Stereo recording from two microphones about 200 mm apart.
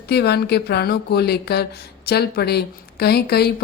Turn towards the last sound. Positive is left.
turn(degrees=55)  # may be behind; listen again after turning